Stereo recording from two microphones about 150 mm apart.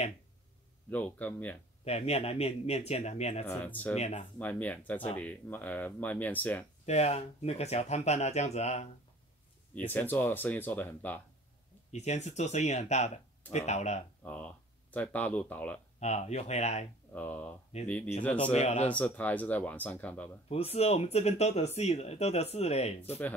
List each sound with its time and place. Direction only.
0.8 s speech: 10° left (ahead or behind)
1.9 s speech: 45° left (ahead or behind)
3.4 s speech: 10° left (ahead or behind)
3.9 s speech: 50° left (ahead or behind)
4.4 s speech: 10° left (ahead or behind)
6.9 s speech: 45° left (ahead or behind)
9.8 s speech: 15° left (ahead or behind)
11.9 s speech: 50° left (ahead or behind)
14.2 s speech: 10° left (ahead or behind)
16.0 s speech: 50° left (ahead or behind)
17.1 s speech: 10° left (ahead or behind)
18.4 s speech: 45° left (ahead or behind)
18.9 s speech: 10° left (ahead or behind)
20.4 s speech: 45° left (ahead or behind)